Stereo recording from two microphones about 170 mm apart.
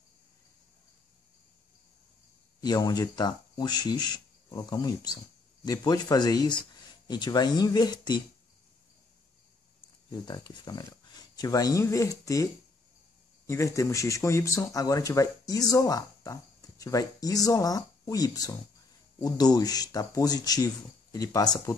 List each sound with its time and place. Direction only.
2.6 s speech: 25° left (ahead or behind)
10.0 s speech: 25° left (ahead or behind)
13.5 s speech: 15° left (ahead or behind)